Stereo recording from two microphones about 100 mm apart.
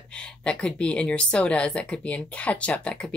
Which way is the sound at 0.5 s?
10° left (ahead or behind).